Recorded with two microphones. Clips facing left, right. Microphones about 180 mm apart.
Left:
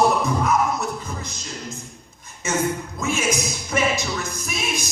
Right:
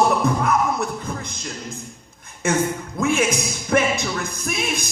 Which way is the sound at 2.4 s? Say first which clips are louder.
Right 2 dB; 55° right (ahead or behind).